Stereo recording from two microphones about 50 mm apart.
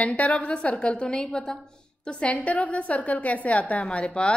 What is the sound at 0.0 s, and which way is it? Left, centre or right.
A woman's voice, left.